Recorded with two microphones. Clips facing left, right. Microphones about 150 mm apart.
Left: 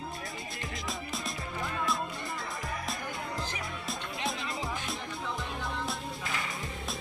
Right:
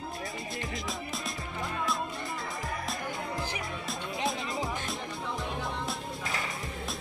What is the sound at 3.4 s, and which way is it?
Music, 10° right (ahead or behind).